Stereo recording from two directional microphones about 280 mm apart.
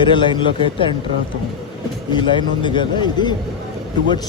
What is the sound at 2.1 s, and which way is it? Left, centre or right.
Speech, centre.